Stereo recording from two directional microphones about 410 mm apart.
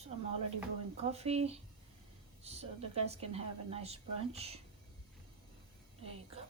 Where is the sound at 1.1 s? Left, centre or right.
Centre.